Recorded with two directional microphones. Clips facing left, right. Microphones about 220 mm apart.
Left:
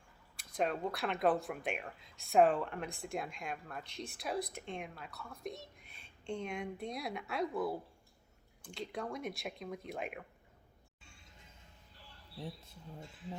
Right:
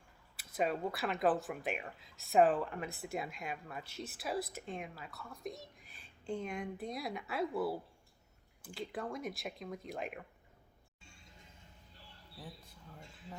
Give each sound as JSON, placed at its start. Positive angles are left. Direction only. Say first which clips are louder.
{"t": 0.3, "sound": "speech", "louder": "even", "side_deg": -5}
{"t": 12.4, "sound": "speech", "louder": "left 6 dB", "side_deg": 25}